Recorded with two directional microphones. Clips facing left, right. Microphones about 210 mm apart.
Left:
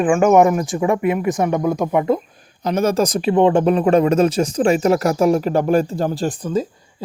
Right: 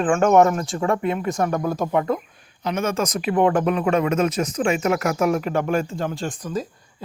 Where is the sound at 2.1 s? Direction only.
35° left (ahead or behind).